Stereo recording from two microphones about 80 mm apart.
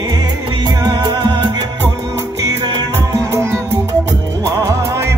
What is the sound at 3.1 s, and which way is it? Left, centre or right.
Music, right.